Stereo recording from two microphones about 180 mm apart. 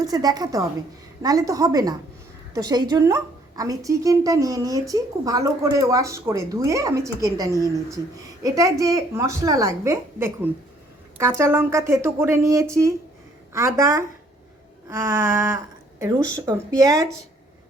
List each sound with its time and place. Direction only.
0.0 s a woman's voice: 20° right (ahead or behind)